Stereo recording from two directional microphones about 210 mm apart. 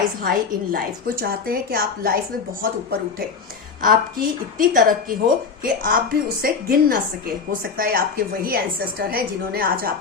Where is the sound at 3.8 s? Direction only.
40° right (ahead or behind).